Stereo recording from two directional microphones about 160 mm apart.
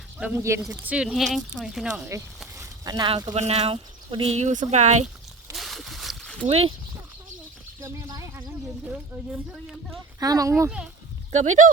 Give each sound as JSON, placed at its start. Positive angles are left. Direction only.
{"t": 0.2, "sound": "speech", "side_deg": -15}
{"t": 2.6, "sound": "speech", "side_deg": -25}
{"t": 3.3, "sound": "speech", "side_deg": -40}
{"t": 5.5, "sound": "a sound", "side_deg": 0}
{"t": 6.4, "sound": "speech", "side_deg": -35}
{"t": 7.8, "sound": "a sound", "side_deg": -20}
{"t": 8.9, "sound": "speech", "side_deg": -10}
{"t": 10.2, "sound": "speech", "side_deg": -20}
{"t": 11.3, "sound": "speech", "side_deg": -45}